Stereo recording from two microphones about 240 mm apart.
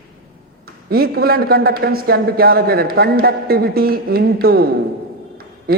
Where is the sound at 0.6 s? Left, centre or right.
Right.